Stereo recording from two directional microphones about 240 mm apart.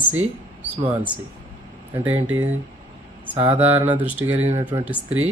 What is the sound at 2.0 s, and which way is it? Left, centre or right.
Speech, centre.